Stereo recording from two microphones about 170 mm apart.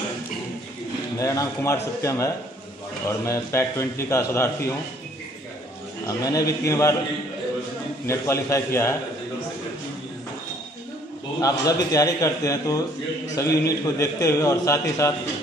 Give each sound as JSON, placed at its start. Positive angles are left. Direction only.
{"t": 1.1, "sound": "a man's voice", "side_deg": 20}
{"t": 6.0, "sound": "a man's voice", "side_deg": 20}
{"t": 8.1, "sound": "a man's voice", "side_deg": 15}
{"t": 11.4, "sound": "a man's voice", "side_deg": 20}